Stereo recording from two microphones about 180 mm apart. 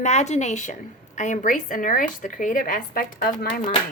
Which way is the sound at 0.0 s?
40° left (ahead or behind).